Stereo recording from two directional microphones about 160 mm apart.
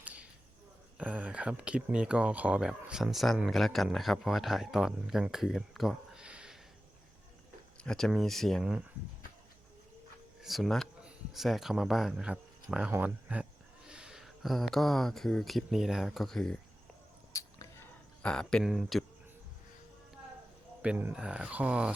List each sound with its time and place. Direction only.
0.0 s cricket: 10° right (ahead or behind)
0.9 s speech: 10° right (ahead or behind)
7.8 s speech: 5° left (ahead or behind)
10.4 s speech: centre (ahead or behind)
17.3 s a sound: 20° left (ahead or behind)
18.2 s speech: 5° left (ahead or behind)
20.8 s speech: 10° right (ahead or behind)